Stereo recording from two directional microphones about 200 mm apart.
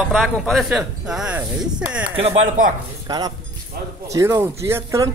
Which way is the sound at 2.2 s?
30° right (ahead or behind).